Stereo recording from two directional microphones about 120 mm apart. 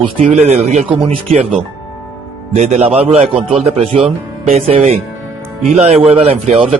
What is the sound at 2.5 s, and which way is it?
Speech, 70° right (ahead or behind).